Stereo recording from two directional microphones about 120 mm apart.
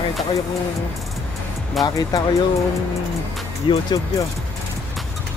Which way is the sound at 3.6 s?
45° left (ahead or behind).